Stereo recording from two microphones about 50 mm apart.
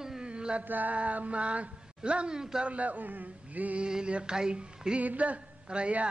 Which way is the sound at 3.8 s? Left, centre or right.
Centre.